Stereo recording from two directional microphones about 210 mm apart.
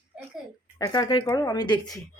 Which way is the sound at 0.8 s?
20° left (ahead or behind).